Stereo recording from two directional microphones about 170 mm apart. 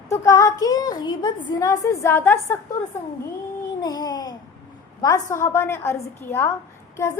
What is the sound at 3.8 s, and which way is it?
Babbling, 25° left (ahead or behind).